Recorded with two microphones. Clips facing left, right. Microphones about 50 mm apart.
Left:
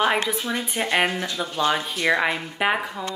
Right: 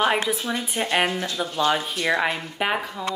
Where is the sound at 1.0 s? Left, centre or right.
Left.